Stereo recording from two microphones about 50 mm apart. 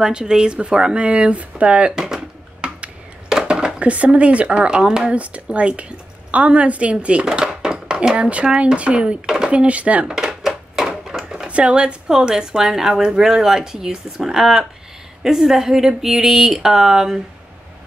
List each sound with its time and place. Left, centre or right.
0.0 s speech: centre
2.0 s a sound: centre
3.3 s speech: centre
5.1 s a woman's voice: right
9.5 s speech: right
10.0 s dishes: centre
11.4 s speech: right